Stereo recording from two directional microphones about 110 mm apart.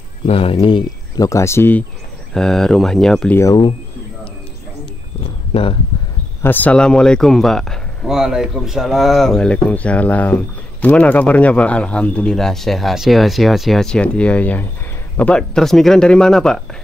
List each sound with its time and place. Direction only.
0.3 s speech: 60° left (ahead or behind)
1.1 s speech: 30° left (ahead or behind)
2.3 s speech: 5° left (ahead or behind)
5.5 s speech: 55° left (ahead or behind)
6.4 s speech: 15° left (ahead or behind)